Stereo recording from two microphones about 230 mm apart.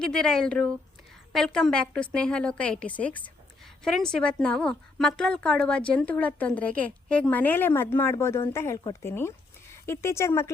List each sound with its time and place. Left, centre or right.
0.0 s a woman's voice: centre